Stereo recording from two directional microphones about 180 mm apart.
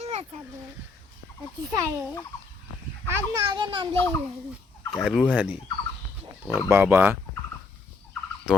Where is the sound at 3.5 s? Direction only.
25° right (ahead or behind).